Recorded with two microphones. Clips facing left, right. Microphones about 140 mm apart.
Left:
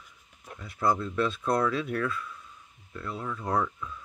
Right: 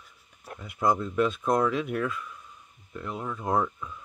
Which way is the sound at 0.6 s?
15° right (ahead or behind).